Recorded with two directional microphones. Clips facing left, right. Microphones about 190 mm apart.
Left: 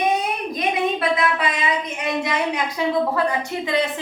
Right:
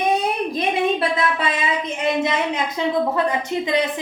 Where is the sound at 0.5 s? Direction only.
25° right (ahead or behind).